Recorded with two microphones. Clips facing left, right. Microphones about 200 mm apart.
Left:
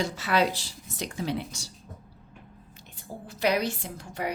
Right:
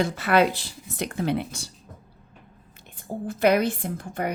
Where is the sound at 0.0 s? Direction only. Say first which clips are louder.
Right 5 dB; 55° right (ahead or behind).